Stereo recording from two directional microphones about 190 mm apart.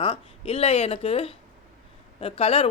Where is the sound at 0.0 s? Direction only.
30° left (ahead or behind).